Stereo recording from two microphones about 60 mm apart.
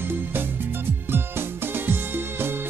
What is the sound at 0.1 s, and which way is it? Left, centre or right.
Music, right.